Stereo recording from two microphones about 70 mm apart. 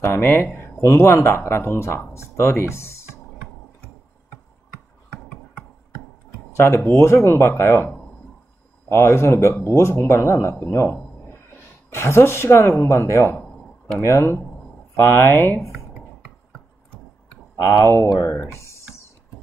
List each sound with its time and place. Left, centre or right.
0.0 s speech: left
6.5 s speech: left
10.7 s a sound: left
11.9 s speech: left
17.8 s speech: left
18.5 s typing: left